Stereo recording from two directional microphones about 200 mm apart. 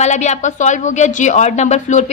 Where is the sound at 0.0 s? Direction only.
35° left (ahead or behind).